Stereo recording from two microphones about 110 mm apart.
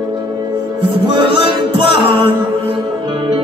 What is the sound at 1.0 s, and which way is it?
Music, 50° right (ahead or behind).